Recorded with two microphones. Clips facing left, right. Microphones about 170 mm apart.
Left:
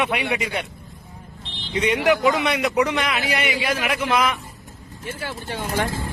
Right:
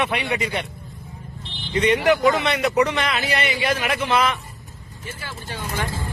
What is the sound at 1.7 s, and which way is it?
A man's voice, 10° left (ahead or behind).